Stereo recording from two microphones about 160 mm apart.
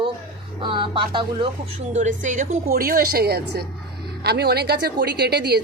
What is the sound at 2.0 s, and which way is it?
Speech, 50° right (ahead or behind).